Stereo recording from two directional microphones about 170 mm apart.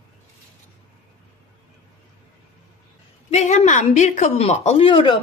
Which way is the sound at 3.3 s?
45° left (ahead or behind).